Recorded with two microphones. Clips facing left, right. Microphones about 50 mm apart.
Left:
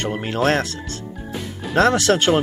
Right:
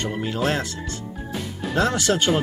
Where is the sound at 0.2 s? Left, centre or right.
Left.